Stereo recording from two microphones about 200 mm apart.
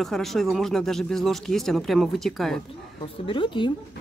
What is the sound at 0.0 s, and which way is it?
Speech, centre (ahead or behind).